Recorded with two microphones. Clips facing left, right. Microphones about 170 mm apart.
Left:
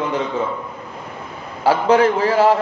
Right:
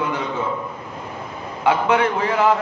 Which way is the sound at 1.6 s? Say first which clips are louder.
Left 4 dB; 35° left (ahead or behind).